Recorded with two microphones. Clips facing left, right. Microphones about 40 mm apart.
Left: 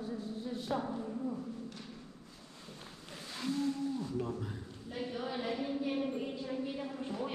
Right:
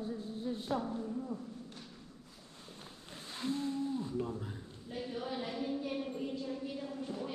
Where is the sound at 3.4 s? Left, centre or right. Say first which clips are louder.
Left 1 dB; right.